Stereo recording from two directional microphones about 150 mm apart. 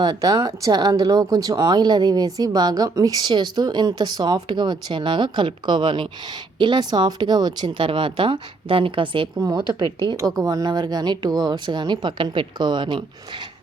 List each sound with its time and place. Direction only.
0.0 s speech: 25° right (ahead or behind)